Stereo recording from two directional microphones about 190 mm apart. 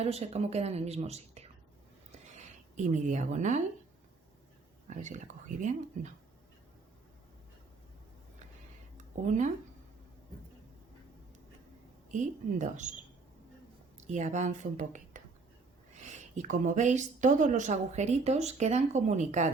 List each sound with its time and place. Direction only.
0.0 s a woman's voice: 35° right (ahead or behind)
2.7 s a woman's voice: 40° right (ahead or behind)
4.9 s a woman's voice: 40° right (ahead or behind)
9.0 s a sound: 40° right (ahead or behind)
12.1 s a woman's voice: 40° right (ahead or behind)
14.1 s a woman's voice: 40° right (ahead or behind)
16.4 s a woman's voice: 40° right (ahead or behind)